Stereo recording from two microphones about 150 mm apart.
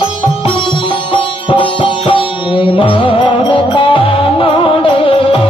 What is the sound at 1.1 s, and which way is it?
Sitar, 35° left (ahead or behind).